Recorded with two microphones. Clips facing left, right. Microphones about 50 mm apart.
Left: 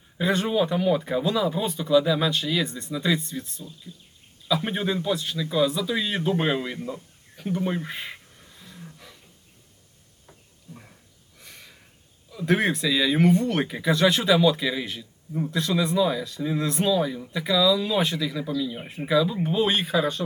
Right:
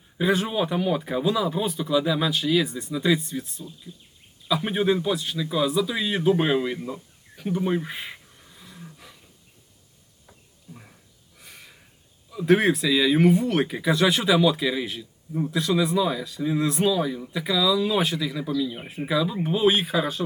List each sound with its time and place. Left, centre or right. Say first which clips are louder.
0.2 s speech: even; centre
6.7 s speech: even; centre
7.3 s wild animals: right 2 dB; centre
11.3 s a sound: even; centre
12.3 s speech: right 4 dB; centre